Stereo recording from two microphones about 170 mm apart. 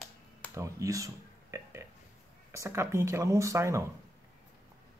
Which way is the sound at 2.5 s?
15° right (ahead or behind).